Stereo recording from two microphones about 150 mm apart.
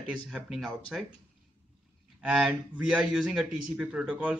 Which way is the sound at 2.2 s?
5° right (ahead or behind).